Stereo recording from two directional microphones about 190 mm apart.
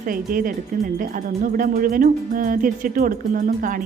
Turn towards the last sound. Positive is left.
turn(degrees=-45)  # may be behind; listen again after turning